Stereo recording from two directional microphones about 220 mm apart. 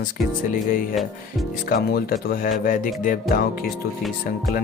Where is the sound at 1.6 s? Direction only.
40° left (ahead or behind).